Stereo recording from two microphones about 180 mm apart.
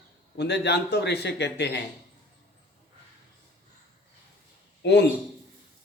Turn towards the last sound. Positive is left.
turn(degrees=70)  # may be behind; listen again after turning